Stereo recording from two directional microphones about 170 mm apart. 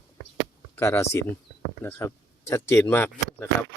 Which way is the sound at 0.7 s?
15° left (ahead or behind).